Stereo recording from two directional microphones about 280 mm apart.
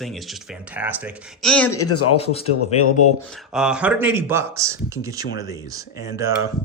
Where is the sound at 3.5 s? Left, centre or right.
Centre.